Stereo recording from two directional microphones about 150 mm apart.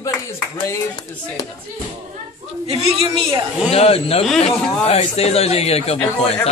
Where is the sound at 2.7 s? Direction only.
40° right (ahead or behind).